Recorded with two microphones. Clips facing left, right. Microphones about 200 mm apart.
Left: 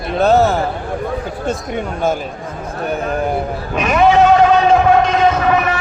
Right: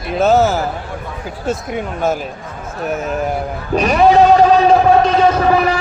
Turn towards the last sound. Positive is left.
turn(degrees=-30)  # may be behind; listen again after turning